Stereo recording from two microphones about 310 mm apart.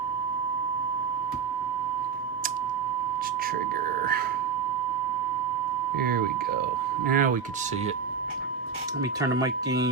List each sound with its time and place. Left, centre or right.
6.0 s speech: right
9.2 s speech: centre